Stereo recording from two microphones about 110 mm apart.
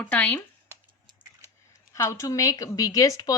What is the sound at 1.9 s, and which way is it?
Speech, 30° left (ahead or behind).